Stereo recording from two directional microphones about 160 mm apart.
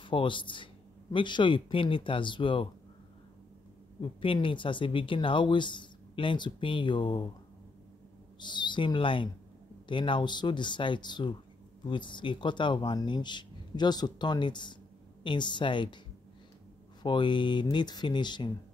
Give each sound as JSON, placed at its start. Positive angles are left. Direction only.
{"t": 0.0, "sound": "speech", "side_deg": 30}
{"t": 4.0, "sound": "speech", "side_deg": 35}
{"t": 8.4, "sound": "speech", "side_deg": 30}
{"t": 17.0, "sound": "speech", "side_deg": 30}